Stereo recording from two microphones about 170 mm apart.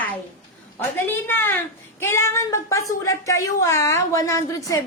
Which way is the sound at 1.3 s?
10° left (ahead or behind).